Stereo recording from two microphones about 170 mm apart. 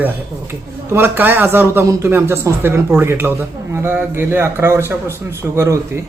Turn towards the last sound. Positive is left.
turn(degrees=-15)  # may be behind; listen again after turning